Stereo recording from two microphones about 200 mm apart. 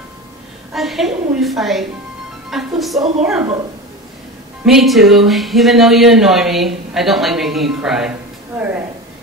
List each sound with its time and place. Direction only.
0.7 s speech: centre (ahead or behind)
4.6 s speech: centre (ahead or behind)
8.5 s a sound: 10° right (ahead or behind)